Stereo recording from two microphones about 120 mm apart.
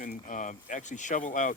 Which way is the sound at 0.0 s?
90° left.